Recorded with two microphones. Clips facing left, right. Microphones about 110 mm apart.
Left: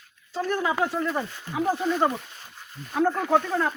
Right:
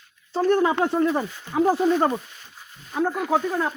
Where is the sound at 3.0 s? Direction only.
5° right (ahead or behind).